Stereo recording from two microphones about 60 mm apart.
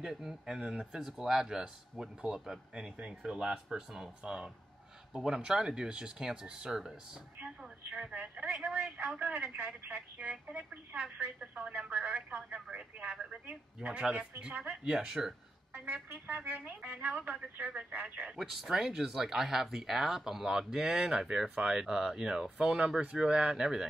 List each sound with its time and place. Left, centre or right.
0.0 s speech: centre
7.3 s speech: right
15.7 s speech: right
18.3 s speech: centre